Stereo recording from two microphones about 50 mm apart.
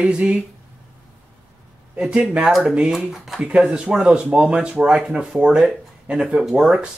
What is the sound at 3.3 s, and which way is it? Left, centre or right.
Speech, right.